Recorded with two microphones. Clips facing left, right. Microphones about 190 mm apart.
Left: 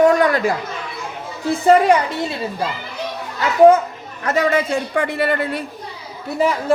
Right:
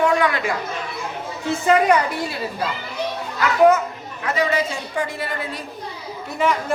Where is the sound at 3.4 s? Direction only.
30° left (ahead or behind).